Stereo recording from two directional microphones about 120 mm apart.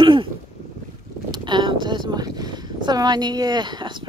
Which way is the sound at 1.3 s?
40° right (ahead or behind).